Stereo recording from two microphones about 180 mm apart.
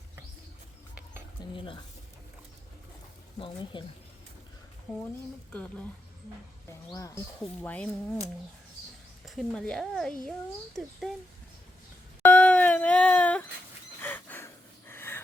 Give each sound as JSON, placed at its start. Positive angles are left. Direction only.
{"t": 1.5, "sound": "speech", "side_deg": 30}
{"t": 3.3, "sound": "speech", "side_deg": 30}
{"t": 5.5, "sound": "speech", "side_deg": 10}
{"t": 6.9, "sound": "speech", "side_deg": 15}
{"t": 9.2, "sound": "speech", "side_deg": 0}
{"t": 12.2, "sound": "a sound", "side_deg": 5}
{"t": 14.0, "sound": "gasp", "side_deg": 10}